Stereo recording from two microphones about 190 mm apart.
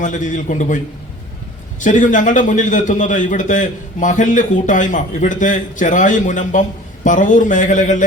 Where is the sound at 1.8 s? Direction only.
40° left (ahead or behind).